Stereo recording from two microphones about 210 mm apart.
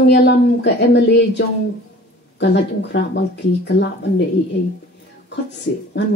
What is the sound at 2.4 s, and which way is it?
Speech, 55° left (ahead or behind).